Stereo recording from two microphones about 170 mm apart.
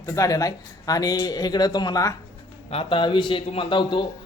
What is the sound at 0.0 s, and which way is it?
A man's voice, 20° left (ahead or behind).